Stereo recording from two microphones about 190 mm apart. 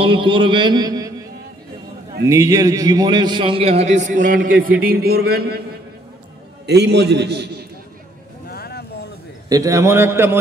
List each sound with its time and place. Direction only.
0.0 s a man's voice: 25° right (ahead or behind)
2.2 s a man's voice: 15° right (ahead or behind); by 5.5 s 55° right (ahead or behind)
6.6 s a man's voice: 60° right (ahead or behind)
8.5 s vehicle: 55° left (ahead or behind)
9.5 s a man's voice: 15° right (ahead or behind)